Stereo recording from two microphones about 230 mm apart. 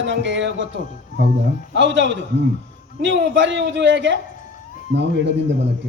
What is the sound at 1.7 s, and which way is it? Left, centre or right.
A man's voice, right.